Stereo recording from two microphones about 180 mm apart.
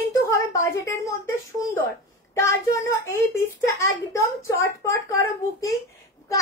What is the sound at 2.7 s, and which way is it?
Speech, 15° left (ahead or behind).